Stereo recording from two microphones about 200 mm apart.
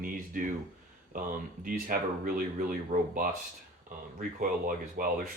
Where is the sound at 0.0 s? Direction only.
45° right (ahead or behind).